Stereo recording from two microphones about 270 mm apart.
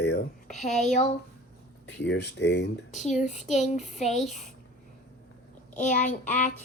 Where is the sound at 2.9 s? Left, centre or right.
Left.